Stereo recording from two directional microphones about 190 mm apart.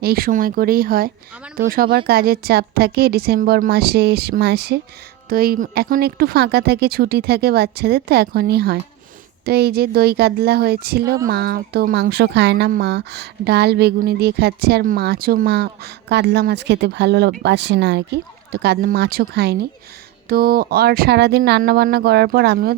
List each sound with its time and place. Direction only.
0.0 s speech: 50° right (ahead or behind)